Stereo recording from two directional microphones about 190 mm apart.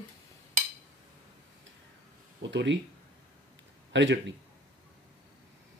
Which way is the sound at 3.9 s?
70° right (ahead or behind).